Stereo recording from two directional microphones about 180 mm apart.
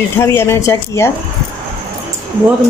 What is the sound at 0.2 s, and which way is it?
Speech, 15° left (ahead or behind).